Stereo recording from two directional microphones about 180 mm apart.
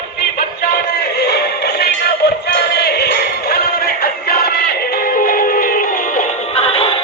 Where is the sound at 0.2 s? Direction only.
55° left (ahead or behind).